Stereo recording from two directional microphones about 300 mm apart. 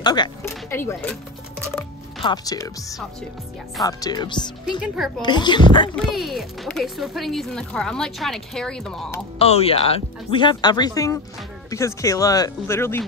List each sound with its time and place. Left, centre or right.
0.0 s speech: centre
1.7 s music: centre
3.8 s speech: centre
4.7 s speech: centre
5.2 s speech: centre
5.9 s speech: centre
9.4 s speech: centre